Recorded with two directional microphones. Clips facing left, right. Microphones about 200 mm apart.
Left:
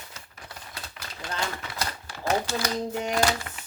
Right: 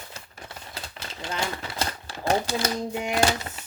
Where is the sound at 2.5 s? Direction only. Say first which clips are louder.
Right 2 dB; 25° right (ahead or behind).